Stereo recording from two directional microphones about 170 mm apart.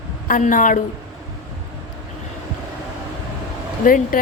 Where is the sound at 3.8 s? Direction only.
55° left (ahead or behind).